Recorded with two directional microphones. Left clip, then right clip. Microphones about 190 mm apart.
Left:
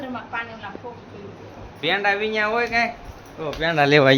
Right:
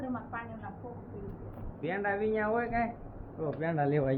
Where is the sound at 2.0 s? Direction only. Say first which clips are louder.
Left 7 dB; 20° left (ahead or behind).